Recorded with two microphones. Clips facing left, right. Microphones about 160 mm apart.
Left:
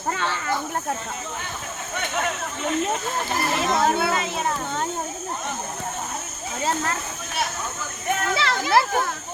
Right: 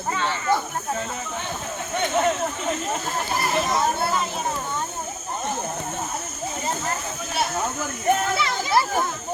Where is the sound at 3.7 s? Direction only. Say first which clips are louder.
Left 2 dB; 65° left (ahead or behind).